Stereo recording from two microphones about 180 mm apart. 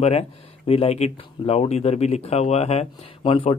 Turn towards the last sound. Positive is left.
turn(degrees=30)  # may be behind; listen again after turning